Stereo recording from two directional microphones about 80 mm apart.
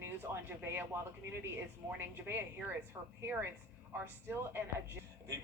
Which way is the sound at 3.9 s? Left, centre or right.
Right.